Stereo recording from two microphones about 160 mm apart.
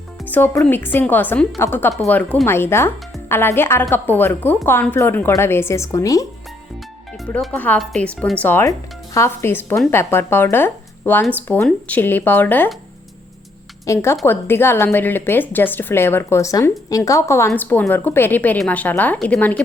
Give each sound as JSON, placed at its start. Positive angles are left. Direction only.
{"t": 0.3, "sound": "speech", "side_deg": 10}
{"t": 7.3, "sound": "speech", "side_deg": 10}
{"t": 13.8, "sound": "speech", "side_deg": 15}